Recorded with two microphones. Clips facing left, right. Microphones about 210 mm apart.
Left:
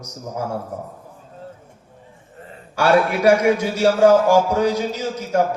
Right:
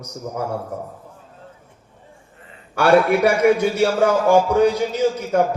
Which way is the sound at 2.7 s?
60° right (ahead or behind).